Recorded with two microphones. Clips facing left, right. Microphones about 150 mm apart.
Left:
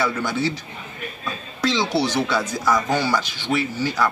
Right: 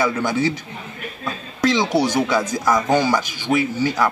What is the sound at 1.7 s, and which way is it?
Speech, 15° right (ahead or behind).